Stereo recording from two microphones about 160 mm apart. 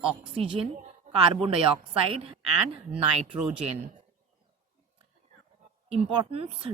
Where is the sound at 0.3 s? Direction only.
35° right (ahead or behind).